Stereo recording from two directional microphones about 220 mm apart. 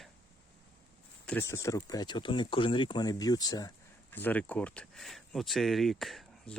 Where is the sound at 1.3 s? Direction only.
10° left (ahead or behind).